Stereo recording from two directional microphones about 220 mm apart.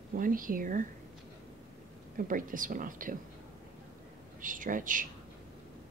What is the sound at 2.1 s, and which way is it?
A woman's voice, 40° right (ahead or behind).